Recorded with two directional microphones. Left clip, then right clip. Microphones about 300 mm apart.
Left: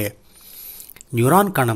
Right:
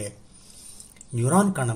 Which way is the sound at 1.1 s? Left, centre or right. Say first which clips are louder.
Left 8 dB; left.